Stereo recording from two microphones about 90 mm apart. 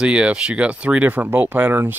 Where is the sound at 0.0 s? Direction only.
10° right (ahead or behind).